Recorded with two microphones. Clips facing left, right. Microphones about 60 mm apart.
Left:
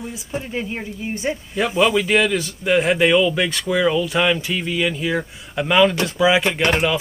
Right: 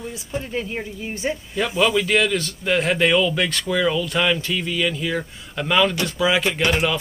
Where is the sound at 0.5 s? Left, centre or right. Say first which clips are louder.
Even; centre.